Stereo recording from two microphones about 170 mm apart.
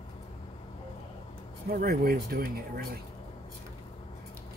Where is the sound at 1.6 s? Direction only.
60° right (ahead or behind).